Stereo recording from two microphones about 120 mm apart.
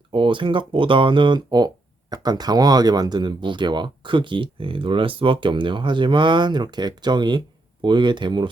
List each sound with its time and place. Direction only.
0.1 s speech: 45° right (ahead or behind)